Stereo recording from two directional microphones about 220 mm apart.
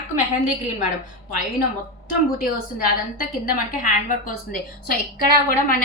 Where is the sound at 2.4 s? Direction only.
40° left (ahead or behind).